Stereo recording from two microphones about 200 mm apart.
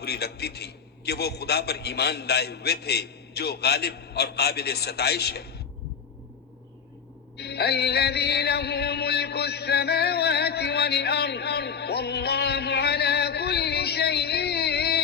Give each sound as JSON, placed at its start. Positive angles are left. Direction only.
{"t": 0.0, "sound": "a man's voice", "side_deg": 55}
{"t": 7.3, "sound": "music", "side_deg": 55}